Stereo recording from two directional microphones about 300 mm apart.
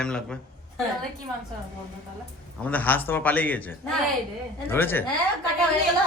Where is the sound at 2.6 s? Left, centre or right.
Centre.